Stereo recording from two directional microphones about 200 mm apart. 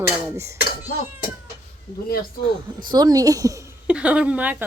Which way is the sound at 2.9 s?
20° right (ahead or behind).